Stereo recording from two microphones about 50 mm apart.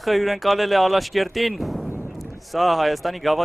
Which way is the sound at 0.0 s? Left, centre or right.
Centre.